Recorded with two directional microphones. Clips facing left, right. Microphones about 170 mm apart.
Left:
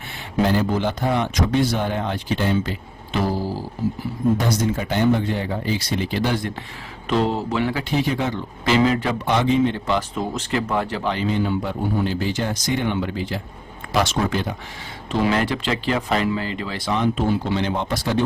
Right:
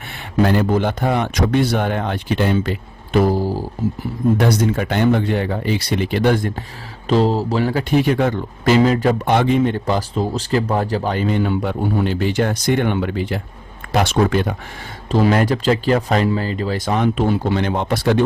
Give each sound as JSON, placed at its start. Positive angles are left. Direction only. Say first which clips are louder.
{"t": 0.5, "sound": "speech", "louder": "right 4 dB", "side_deg": -55}
{"t": 4.4, "sound": "speech", "louder": "right 5 dB", "side_deg": -65}
{"t": 7.1, "sound": "speech", "louder": "right 5 dB", "side_deg": -35}
{"t": 8.0, "sound": "speech", "louder": "right 6 dB", "side_deg": -55}
{"t": 9.2, "sound": "speech", "louder": "left 1 dB", "side_deg": -55}
{"t": 15.1, "sound": "speech", "louder": "right 5 dB", "side_deg": -40}